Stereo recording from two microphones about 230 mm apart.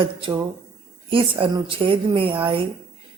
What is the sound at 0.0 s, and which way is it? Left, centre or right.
A woman's voice, right.